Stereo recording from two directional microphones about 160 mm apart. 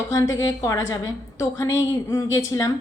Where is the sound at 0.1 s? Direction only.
20° left (ahead or behind).